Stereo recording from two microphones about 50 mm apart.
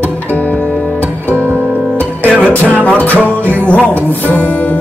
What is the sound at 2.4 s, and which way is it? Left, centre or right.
Music, left.